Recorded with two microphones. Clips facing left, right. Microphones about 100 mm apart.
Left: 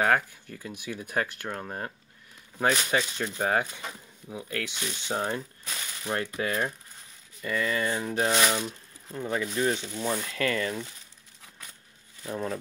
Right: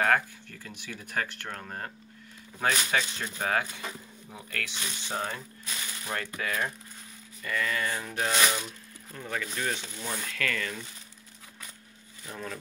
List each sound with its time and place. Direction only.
0.0 s speech: 15° left (ahead or behind)
12.3 s speech: 30° left (ahead or behind)